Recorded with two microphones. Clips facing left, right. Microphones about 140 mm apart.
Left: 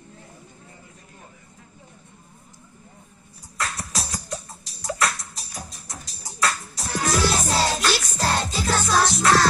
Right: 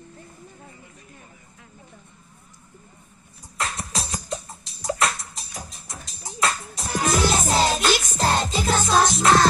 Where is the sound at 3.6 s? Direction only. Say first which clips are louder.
Right 1 dB; 20° right (ahead or behind).